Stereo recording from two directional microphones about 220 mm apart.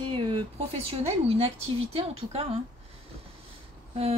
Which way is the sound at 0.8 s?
25° right (ahead or behind).